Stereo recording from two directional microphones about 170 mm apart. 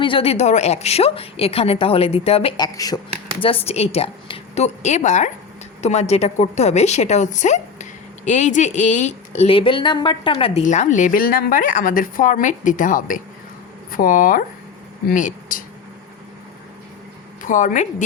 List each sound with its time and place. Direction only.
0.0 s a woman's voice: 35° left (ahead or behind)
2.7 s speech: 20° left (ahead or behind)
3.4 s a woman's voice: 35° left (ahead or behind)
10.6 s speech: 45° left (ahead or behind)
17.4 s a woman's voice: 50° left (ahead or behind)